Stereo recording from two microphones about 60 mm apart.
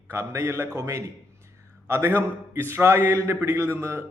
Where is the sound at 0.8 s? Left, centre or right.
Right.